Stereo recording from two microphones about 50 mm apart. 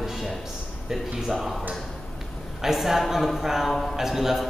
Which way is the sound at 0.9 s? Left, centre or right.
Centre.